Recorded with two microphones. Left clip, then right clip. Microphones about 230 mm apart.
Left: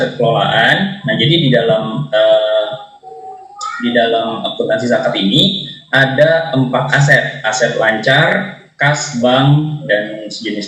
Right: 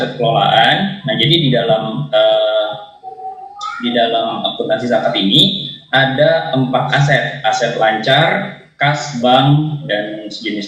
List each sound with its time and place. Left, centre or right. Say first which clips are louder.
0.2 s speech: right 2 dB; left